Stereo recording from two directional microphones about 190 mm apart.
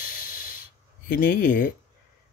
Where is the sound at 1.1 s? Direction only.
50° left (ahead or behind).